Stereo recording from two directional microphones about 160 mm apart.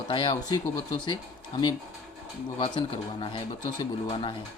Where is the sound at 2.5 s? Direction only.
30° left (ahead or behind).